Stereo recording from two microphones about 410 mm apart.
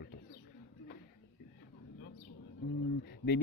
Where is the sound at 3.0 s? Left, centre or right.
Left.